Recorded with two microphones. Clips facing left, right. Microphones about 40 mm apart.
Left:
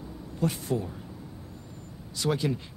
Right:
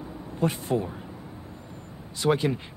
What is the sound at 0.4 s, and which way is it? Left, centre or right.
Speech, right.